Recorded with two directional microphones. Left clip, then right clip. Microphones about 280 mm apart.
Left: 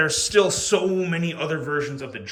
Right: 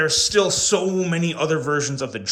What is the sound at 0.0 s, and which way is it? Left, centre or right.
A man's voice, centre.